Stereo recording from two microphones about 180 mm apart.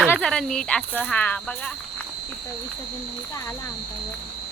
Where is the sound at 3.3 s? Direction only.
15° left (ahead or behind).